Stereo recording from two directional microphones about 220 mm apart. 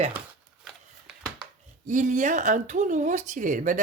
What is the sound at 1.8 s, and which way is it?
Speech, 35° right (ahead or behind).